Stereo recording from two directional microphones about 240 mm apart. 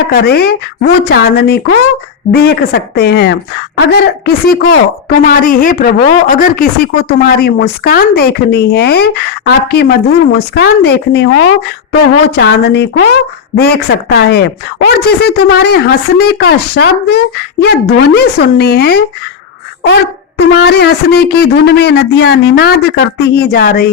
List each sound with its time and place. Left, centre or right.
0.1 s speech: left
12.4 s speech: left
20.6 s speech: left